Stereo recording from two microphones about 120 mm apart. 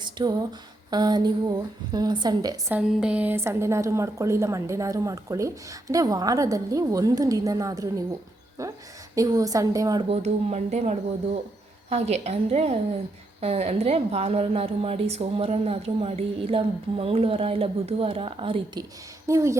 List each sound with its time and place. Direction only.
0.0 s a sound: 35° right (ahead or behind)
0.9 s a woman's voice: 35° right (ahead or behind)
2.8 s a woman's voice: 5° right (ahead or behind); by 10.0 s 30° right (ahead or behind)
10.2 s a woman's voice: 70° right (ahead or behind); by 18.8 s 50° right (ahead or behind)
19.3 s a woman's voice: 25° right (ahead or behind)